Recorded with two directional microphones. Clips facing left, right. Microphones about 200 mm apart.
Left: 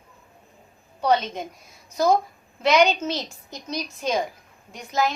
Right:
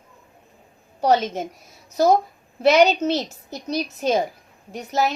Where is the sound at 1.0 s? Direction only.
40° right (ahead or behind).